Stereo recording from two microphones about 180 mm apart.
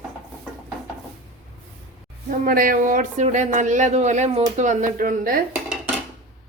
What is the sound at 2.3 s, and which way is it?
Speech, 50° right (ahead or behind).